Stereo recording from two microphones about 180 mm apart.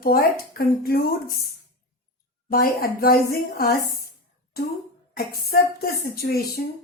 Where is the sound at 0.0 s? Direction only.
55° left (ahead or behind).